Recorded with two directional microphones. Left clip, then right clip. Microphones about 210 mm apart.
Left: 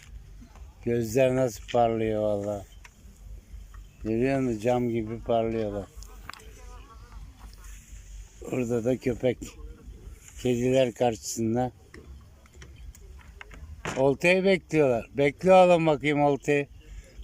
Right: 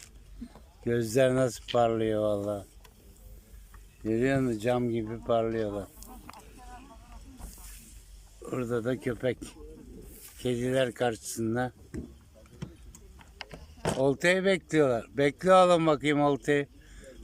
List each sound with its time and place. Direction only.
0.9 s speech: centre (ahead or behind)
4.1 s speech: centre (ahead or behind)
8.4 s speech: 5° left (ahead or behind)
11.9 s a sound: 55° right (ahead or behind)
14.0 s speech: centre (ahead or behind)